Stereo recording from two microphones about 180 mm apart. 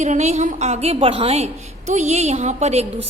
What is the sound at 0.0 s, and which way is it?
A woman's voice, 40° right (ahead or behind).